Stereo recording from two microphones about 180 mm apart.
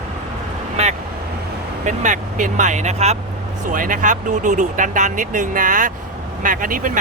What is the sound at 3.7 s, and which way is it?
Speech, 45° right (ahead or behind).